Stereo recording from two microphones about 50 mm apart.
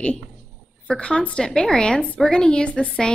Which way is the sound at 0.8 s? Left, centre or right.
Centre.